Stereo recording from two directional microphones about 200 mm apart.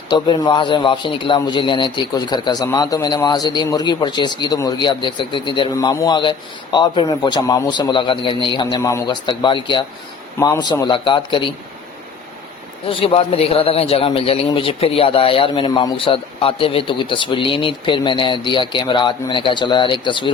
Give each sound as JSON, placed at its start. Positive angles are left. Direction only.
{"t": 0.1, "sound": "a man's voice", "side_deg": 20}
{"t": 12.9, "sound": "a man's voice", "side_deg": 25}